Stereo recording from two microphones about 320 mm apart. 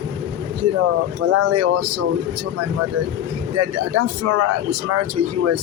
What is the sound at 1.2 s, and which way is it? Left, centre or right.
Speech, right.